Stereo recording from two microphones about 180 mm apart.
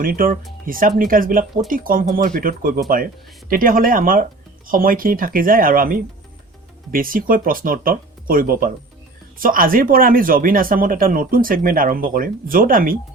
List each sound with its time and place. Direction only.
0.0 s speech: 50° right (ahead or behind)